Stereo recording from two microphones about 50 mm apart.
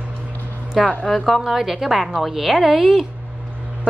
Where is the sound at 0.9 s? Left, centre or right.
Left.